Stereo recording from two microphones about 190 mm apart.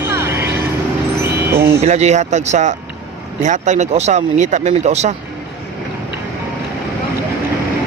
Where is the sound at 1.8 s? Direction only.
35° right (ahead or behind).